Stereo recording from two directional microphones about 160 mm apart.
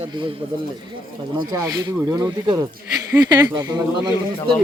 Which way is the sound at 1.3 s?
20° right (ahead or behind).